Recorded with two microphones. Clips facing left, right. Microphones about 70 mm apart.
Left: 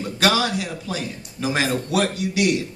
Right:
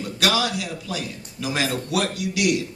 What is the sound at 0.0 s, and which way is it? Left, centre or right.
A man's voice, left.